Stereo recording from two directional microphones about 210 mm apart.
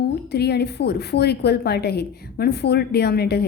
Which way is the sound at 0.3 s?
50° left (ahead or behind).